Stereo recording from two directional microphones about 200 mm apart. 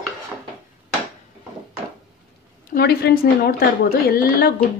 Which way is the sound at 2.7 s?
50° left (ahead or behind).